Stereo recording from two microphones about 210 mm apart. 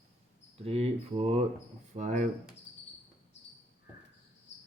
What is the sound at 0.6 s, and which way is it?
Speech, 30° right (ahead or behind).